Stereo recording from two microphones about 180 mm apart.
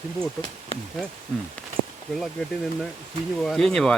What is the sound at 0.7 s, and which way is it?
Speech, 35° left (ahead or behind).